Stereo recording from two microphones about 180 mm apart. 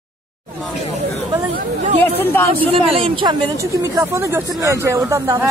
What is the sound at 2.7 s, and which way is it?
Speech, 30° right (ahead or behind).